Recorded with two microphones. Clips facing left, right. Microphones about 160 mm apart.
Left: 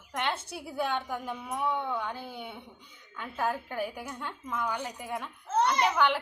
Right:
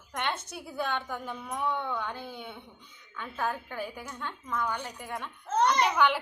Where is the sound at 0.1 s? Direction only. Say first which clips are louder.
Left 1 dB; 5° left (ahead or behind).